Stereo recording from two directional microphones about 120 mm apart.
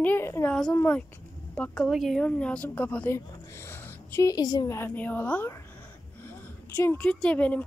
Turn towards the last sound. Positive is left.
turn(degrees=10)  # may be behind; listen again after turning